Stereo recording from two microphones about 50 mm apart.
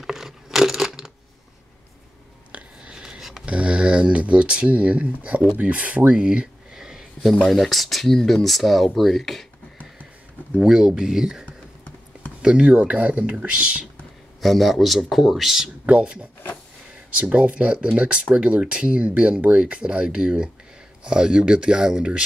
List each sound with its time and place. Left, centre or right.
0.0 s a sound: centre
2.5 s a sound: centre
3.4 s speech: right
7.4 s speech: centre
10.6 s speech: centre
14.4 s speech: centre
15.8 s speech: right